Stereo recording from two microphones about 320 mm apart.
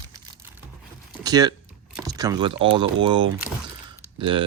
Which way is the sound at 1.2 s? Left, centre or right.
Centre.